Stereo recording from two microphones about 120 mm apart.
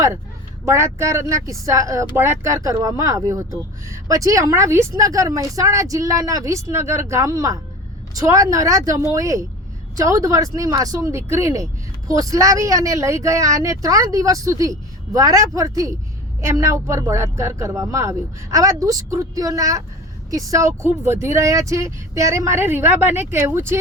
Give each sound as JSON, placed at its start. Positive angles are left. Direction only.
{"t": 0.6, "sound": "speech", "side_deg": -25}